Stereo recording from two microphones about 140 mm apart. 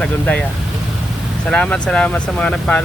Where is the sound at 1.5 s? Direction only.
5° left (ahead or behind).